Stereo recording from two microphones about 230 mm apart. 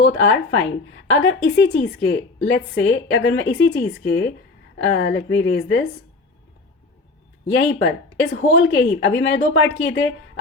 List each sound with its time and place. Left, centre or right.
0.0 s a woman's voice: left
7.4 s a woman's voice: left